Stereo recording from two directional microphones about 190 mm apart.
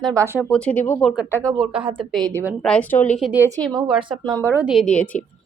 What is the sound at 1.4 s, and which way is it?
Speech, 20° right (ahead or behind).